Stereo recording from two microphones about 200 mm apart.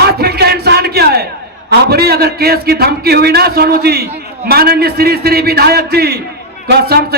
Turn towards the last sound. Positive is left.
turn(degrees=-50)  # may be behind; listen again after turning